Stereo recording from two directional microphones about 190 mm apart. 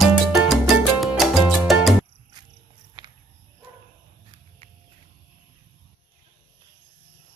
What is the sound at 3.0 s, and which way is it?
Walk, 25° right (ahead or behind).